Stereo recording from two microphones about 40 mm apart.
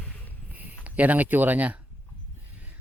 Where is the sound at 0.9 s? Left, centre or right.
Right.